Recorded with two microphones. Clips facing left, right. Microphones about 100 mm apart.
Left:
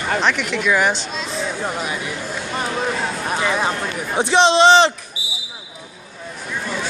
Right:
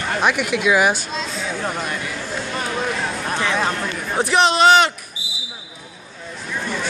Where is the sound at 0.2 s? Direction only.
10° right (ahead or behind).